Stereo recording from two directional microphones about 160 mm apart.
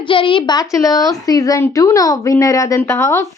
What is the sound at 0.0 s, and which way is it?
A woman's voice, 30° left (ahead or behind).